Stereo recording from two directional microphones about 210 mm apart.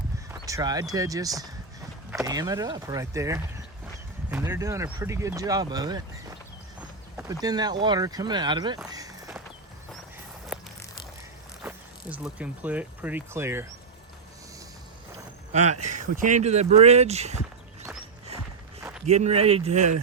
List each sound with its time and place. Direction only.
0.3 s speech: 15° right (ahead or behind)
7.4 s speech: 20° right (ahead or behind)
10.5 s a sound: centre (ahead or behind)
11.6 s speech: 5° right (ahead or behind)
15.9 s speech: 35° right (ahead or behind)
18.8 s a sound: 10° right (ahead or behind)
19.0 s speech: 30° right (ahead or behind)